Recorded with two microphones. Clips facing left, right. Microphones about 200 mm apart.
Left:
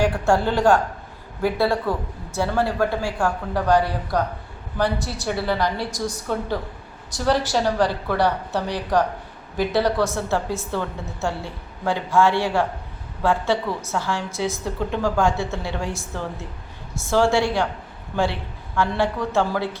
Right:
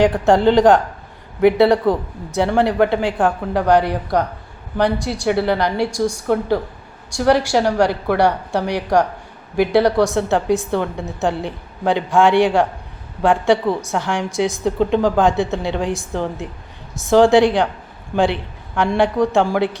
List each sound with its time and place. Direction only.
0.0 s speech: 20° right (ahead or behind)
1.4 s a man's voice: 70° right (ahead or behind)
2.3 s a woman's voice: 20° right (ahead or behind)
5.3 s a woman's voice: 65° right (ahead or behind)
5.7 s a woman's voice: 10° right (ahead or behind)
18.8 s a woman's voice: 15° right (ahead or behind)